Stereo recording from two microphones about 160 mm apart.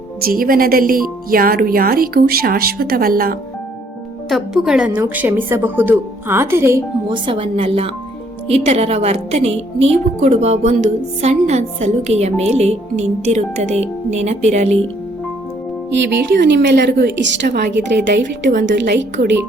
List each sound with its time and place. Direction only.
0.3 s speech: 65° right (ahead or behind)
4.3 s a woman's voice: centre (ahead or behind)
7.1 s a woman's voice: 35° right (ahead or behind)
16.4 s a woman's voice: 90° right